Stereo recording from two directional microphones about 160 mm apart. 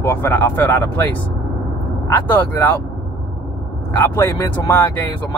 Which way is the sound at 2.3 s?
10° left (ahead or behind).